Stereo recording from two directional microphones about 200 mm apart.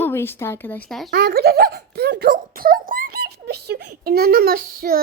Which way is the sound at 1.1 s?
50° right (ahead or behind).